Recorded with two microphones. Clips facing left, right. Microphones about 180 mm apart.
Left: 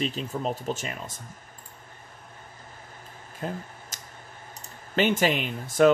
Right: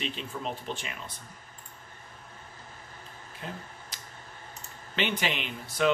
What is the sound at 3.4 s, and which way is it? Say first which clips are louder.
Speech: left 7 dB; 45° left (ahead or behind).